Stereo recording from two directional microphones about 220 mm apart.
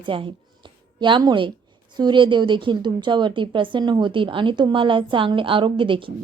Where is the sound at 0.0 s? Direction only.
25° right (ahead or behind).